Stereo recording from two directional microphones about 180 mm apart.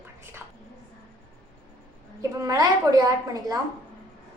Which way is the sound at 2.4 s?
20° right (ahead or behind).